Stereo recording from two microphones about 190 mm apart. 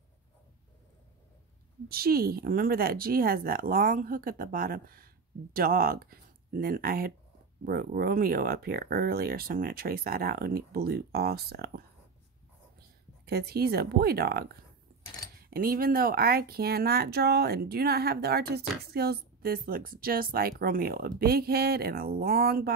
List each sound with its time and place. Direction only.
1.9 s speech: 55° right (ahead or behind)
13.2 s speech: 55° right (ahead or behind)